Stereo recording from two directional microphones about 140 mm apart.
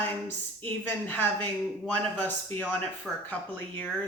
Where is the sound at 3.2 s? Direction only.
10° left (ahead or behind).